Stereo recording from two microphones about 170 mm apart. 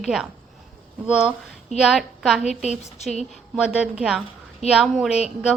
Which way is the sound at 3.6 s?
5° right (ahead or behind).